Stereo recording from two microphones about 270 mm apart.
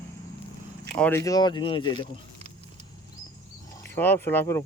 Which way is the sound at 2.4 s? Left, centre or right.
Right.